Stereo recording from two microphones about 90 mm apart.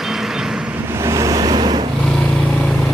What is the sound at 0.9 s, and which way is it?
Vehicle, 30° right (ahead or behind).